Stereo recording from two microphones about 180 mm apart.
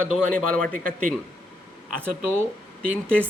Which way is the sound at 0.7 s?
50° right (ahead or behind).